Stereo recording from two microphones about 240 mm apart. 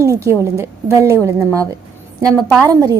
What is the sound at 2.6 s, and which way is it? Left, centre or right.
Speech, centre.